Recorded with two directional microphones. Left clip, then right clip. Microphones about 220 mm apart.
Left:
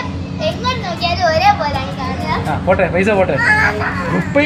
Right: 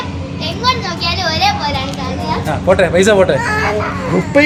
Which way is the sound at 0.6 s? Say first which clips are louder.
Right 3 dB; 10° right (ahead or behind).